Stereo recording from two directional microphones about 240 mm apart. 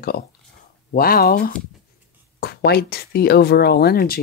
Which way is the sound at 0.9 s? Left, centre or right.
Left.